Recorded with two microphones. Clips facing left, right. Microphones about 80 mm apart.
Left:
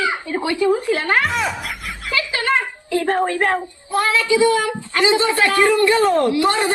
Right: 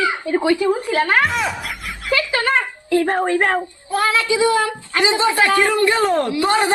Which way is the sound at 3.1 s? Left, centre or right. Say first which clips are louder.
Even; right.